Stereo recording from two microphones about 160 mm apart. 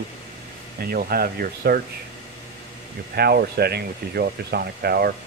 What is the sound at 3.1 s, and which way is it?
Speech, 80° right.